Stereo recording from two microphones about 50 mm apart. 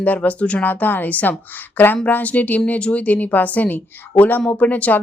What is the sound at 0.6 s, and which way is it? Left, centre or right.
Speech, left.